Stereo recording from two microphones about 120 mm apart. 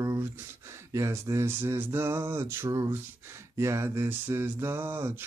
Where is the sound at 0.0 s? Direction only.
25° right (ahead or behind).